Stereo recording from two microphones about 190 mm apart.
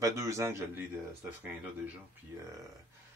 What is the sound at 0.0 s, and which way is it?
Speech, 15° right (ahead or behind).